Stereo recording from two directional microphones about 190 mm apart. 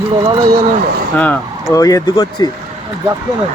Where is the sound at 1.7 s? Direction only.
20° left (ahead or behind).